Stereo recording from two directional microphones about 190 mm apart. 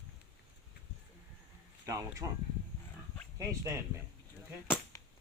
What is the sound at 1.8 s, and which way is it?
Speech, 15° right (ahead or behind).